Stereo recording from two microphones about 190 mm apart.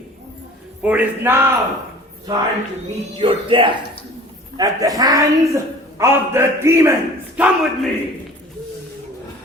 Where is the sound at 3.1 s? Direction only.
25° right (ahead or behind); by 7.5 s 10° right (ahead or behind).